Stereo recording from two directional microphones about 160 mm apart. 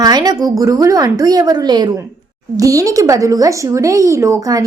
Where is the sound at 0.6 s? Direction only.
20° right (ahead or behind).